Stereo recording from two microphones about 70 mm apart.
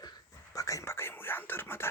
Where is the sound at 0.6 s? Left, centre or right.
Left.